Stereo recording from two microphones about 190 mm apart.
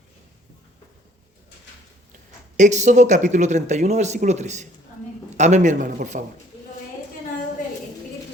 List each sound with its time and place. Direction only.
2.6 s speech: 40° right (ahead or behind)